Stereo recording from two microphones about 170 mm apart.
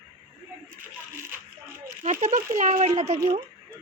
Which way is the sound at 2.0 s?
50° right (ahead or behind).